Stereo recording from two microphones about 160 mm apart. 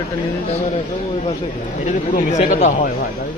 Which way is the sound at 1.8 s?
50° left (ahead or behind).